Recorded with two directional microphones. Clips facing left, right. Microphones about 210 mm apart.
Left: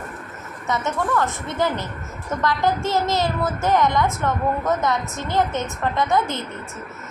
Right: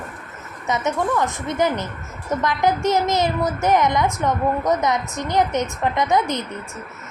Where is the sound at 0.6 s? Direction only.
20° right (ahead or behind).